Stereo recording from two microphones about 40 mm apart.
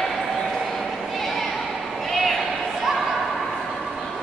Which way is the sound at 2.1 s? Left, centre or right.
Centre.